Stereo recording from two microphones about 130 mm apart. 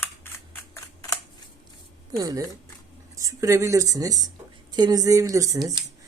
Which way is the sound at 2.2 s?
30° right (ahead or behind).